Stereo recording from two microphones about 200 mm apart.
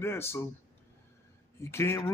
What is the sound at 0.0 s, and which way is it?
Speech, 15° left (ahead or behind).